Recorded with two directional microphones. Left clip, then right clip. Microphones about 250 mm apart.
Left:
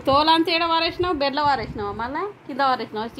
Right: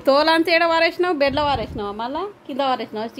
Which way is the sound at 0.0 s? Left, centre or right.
Right.